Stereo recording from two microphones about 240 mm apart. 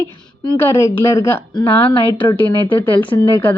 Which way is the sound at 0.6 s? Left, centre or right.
Centre.